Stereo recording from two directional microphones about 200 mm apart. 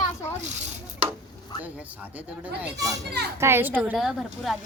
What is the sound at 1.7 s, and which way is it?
A woman's voice, 10° right (ahead or behind).